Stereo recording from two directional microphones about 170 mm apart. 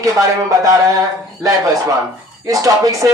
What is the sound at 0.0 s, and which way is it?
Speech, 20° right (ahead or behind).